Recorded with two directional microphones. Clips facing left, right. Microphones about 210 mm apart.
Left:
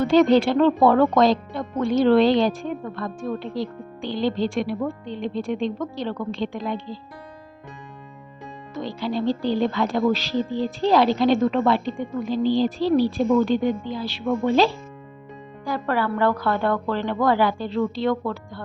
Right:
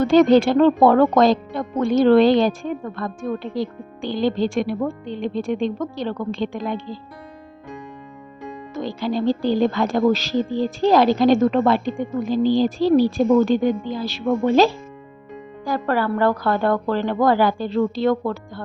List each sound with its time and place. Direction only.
0.0 s speech: 45° right (ahead or behind)
8.7 s speech: 45° right (ahead or behind)